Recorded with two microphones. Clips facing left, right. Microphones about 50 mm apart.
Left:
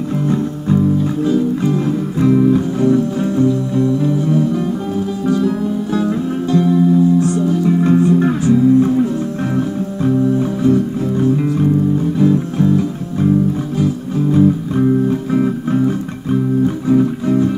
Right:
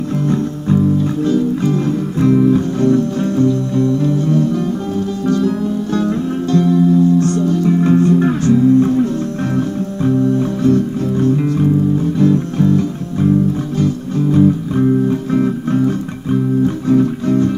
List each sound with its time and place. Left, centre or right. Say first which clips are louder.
1.2 s music: even; centre